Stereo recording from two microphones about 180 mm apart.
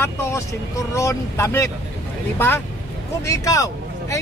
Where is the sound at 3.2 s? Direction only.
20° left (ahead or behind).